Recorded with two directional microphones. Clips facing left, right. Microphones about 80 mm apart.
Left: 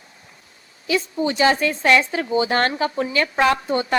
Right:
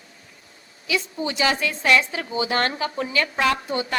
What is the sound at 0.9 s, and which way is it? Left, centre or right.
A woman's voice, left.